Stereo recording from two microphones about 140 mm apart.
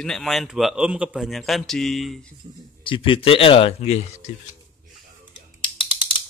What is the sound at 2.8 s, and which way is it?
Speech, 35° left (ahead or behind).